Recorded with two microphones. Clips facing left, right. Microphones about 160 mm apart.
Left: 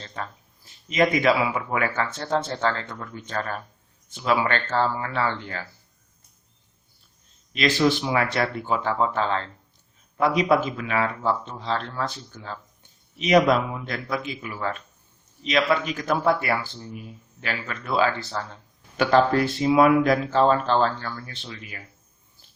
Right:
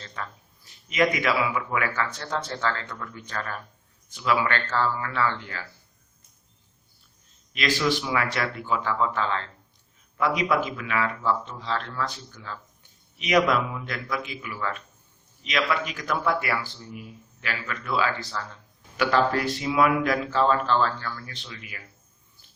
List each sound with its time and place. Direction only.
0.0 s a man's voice: 30° left (ahead or behind)
7.9 s a man's voice: 30° left (ahead or behind)